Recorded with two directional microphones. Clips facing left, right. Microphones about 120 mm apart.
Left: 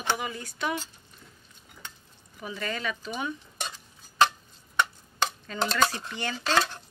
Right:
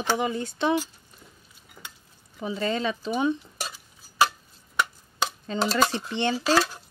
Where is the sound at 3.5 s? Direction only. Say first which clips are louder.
Right 1 dB; 5° right (ahead or behind).